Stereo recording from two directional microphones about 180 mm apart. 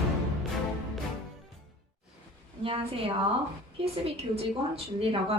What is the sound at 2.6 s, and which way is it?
Speech, 30° right (ahead or behind).